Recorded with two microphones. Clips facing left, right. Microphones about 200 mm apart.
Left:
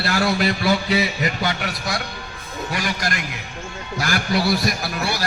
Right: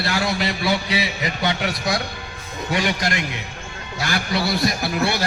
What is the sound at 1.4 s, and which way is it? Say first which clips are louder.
A man's voice: right 2 dB; 20° right (ahead or behind).